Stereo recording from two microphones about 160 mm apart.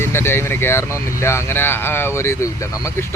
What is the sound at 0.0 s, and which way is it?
Speech, 15° left (ahead or behind).